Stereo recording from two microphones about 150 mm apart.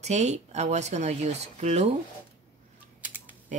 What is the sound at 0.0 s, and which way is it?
Speech, 50° right (ahead or behind).